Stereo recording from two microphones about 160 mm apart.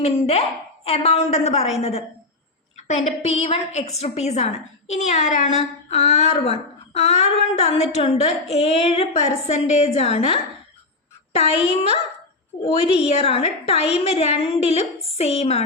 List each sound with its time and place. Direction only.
0.0 s a woman's voice: 40° left (ahead or behind)
2.7 s a sound: 45° left (ahead or behind)
3.2 s a woman's voice: 40° left (ahead or behind)
13.0 s a woman's voice: 40° left (ahead or behind)